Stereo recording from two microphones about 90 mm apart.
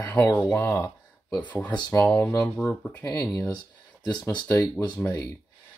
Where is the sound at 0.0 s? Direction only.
20° left (ahead or behind).